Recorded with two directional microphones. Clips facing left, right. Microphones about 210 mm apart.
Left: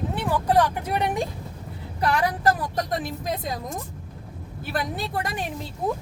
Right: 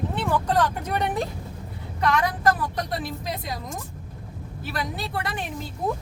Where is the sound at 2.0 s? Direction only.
35° left (ahead or behind).